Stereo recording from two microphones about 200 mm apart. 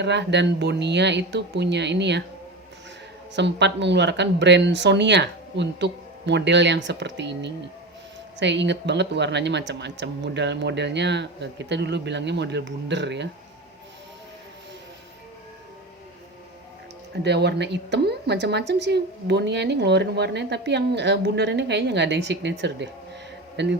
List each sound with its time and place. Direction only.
0.0 s a woman's voice: 60° right (ahead or behind)
3.3 s a woman's voice: 60° right (ahead or behind)
17.2 s a woman's voice: 60° right (ahead or behind)